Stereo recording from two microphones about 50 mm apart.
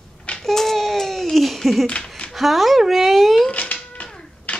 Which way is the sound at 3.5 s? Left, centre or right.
Left.